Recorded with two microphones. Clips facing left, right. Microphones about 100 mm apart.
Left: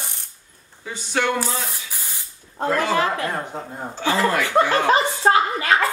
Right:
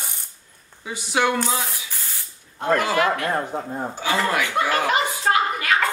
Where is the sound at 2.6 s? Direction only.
35° left (ahead or behind).